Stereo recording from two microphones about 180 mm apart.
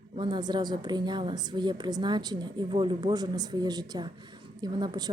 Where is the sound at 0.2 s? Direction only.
25° right (ahead or behind).